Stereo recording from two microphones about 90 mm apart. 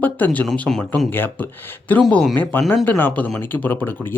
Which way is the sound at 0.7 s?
10° left (ahead or behind).